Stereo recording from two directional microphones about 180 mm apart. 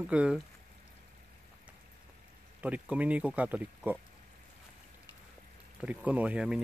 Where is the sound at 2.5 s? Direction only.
10° right (ahead or behind).